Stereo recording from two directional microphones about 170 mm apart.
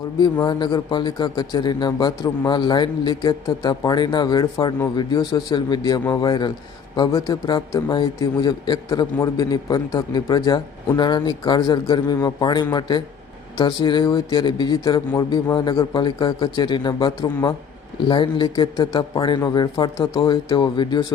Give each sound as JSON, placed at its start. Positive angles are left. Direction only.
{"t": 0.2, "sound": "a man's voice", "side_deg": 25}